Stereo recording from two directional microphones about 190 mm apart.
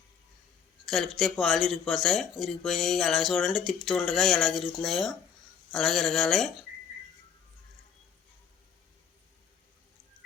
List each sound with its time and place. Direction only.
0.9 s speech: centre (ahead or behind)